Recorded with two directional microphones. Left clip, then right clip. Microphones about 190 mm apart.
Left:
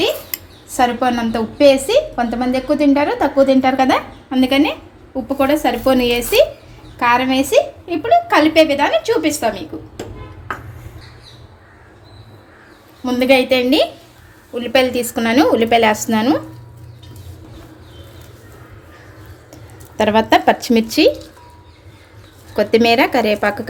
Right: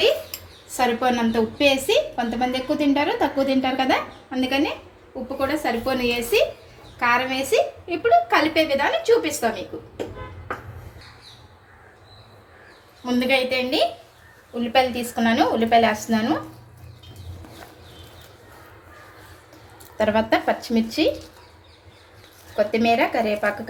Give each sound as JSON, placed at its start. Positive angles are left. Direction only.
{"t": 0.8, "sound": "a woman's voice", "side_deg": 35}
{"t": 13.1, "sound": "a woman's voice", "side_deg": 55}
{"t": 20.0, "sound": "a woman's voice", "side_deg": 40}
{"t": 22.5, "sound": "a woman's voice", "side_deg": 55}